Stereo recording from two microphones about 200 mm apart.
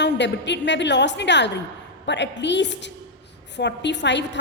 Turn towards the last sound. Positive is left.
turn(degrees=60)  # may be behind; listen again after turning